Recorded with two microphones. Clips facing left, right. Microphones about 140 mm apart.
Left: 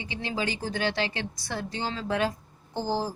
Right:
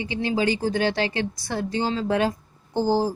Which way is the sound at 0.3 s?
35° right (ahead or behind).